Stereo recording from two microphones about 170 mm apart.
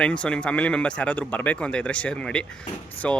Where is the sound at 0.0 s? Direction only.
5° left (ahead or behind).